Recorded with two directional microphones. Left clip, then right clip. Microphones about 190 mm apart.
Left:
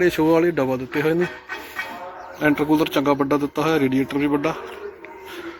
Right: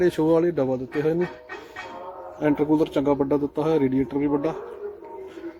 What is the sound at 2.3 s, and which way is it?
Speech, 10° right (ahead or behind).